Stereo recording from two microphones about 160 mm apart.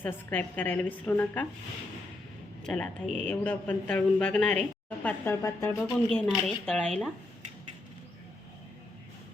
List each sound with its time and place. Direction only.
0.0 s speech: 10° left (ahead or behind)
2.6 s speech: 5° left (ahead or behind)
5.8 s speech: 5° left (ahead or behind)